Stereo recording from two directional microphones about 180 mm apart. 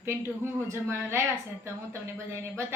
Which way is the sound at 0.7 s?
15° right (ahead or behind).